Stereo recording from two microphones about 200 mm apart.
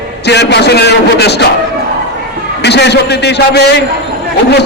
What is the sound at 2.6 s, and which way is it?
A man's voice, 60° left (ahead or behind).